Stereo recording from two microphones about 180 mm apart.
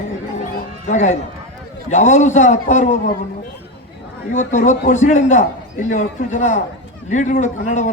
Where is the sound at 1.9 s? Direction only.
40° left (ahead or behind).